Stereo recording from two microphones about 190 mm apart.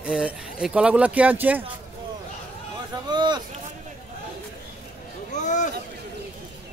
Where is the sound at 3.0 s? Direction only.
25° right (ahead or behind).